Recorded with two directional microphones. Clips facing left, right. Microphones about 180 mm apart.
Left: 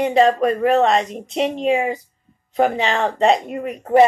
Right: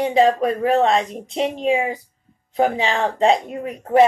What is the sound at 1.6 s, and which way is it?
Speech, 10° right (ahead or behind).